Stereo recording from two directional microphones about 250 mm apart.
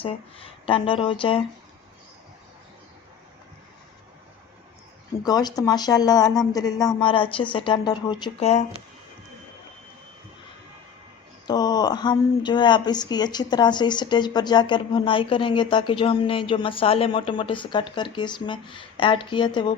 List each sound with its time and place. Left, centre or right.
0.0 s speech: left
5.2 s speech: centre
11.4 s speech: centre